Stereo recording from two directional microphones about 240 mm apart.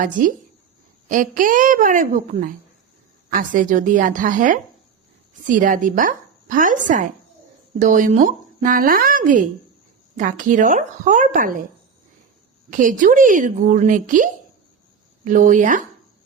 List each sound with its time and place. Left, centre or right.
0.0 s speech: right
12.7 s speech: right